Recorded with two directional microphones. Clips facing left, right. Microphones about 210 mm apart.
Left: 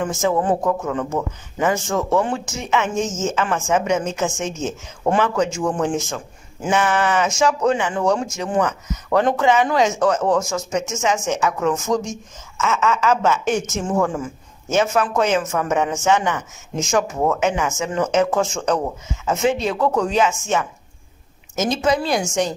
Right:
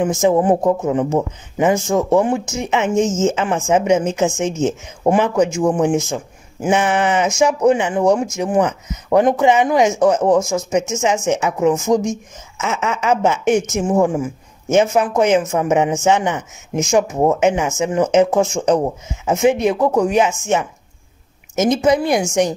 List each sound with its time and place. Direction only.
0.0 s speech: 20° right (ahead or behind)